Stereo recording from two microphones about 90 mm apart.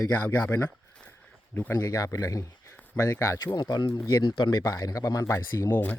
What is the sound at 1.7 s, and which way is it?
Speech, 40° left (ahead or behind).